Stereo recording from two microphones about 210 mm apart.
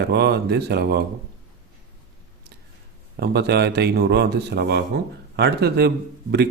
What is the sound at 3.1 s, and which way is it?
Speech, 50° right (ahead or behind).